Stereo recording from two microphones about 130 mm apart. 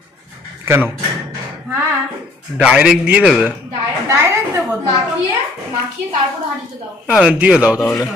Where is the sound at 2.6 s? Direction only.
5° right (ahead or behind).